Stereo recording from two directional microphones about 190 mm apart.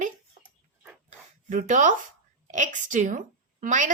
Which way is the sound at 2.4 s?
40° right (ahead or behind).